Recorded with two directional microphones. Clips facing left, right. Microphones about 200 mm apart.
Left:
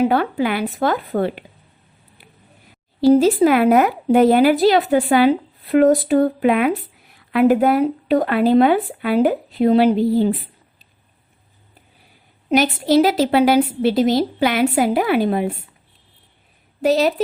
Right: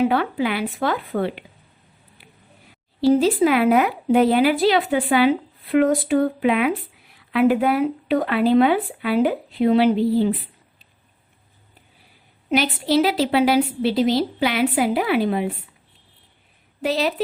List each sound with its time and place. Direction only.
0.0 s a woman's voice: 40° left (ahead or behind)
3.0 s a woman's voice: 40° left (ahead or behind)
12.5 s a woman's voice: 45° left (ahead or behind)
16.8 s a woman's voice: 40° left (ahead or behind)